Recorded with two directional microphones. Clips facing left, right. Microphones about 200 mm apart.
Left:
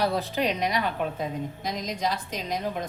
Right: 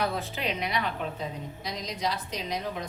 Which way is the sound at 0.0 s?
35° left (ahead or behind).